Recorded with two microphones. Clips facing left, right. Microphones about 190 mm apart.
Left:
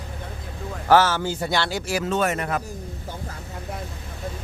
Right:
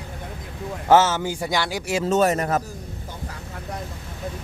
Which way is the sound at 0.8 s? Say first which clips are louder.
Right 1 dB; 20° right (ahead or behind).